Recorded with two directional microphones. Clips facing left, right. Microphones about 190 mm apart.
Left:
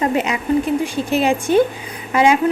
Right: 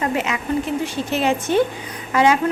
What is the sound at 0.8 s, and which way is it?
A woman's voice, 15° left (ahead or behind).